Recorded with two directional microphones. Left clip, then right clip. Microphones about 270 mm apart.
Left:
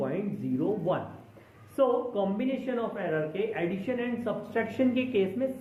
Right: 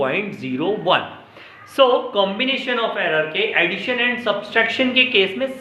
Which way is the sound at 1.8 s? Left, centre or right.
Centre.